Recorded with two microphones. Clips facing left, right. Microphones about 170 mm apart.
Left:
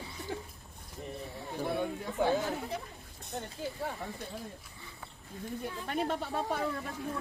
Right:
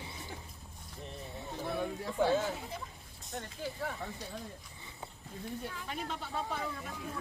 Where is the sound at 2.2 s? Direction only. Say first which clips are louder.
Even; 15° left (ahead or behind).